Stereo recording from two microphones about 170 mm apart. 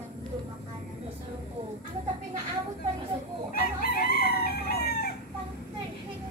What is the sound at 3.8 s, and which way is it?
Chicken, 65° left (ahead or behind).